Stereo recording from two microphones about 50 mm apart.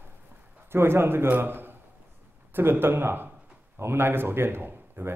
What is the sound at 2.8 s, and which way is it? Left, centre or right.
A man's voice, right.